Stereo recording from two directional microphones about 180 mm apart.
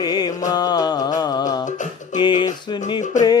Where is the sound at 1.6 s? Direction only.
45° left (ahead or behind).